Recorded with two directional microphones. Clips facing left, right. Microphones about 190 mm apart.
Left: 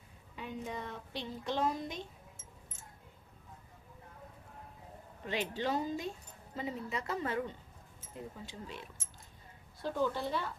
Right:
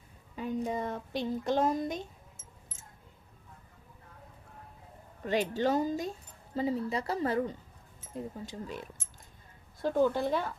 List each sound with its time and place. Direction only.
0.3 s speech: 40° right (ahead or behind)
5.2 s speech: 45° right (ahead or behind)